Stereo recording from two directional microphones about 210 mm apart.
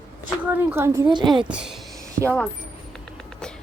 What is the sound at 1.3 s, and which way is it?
Speech, 5° right (ahead or behind).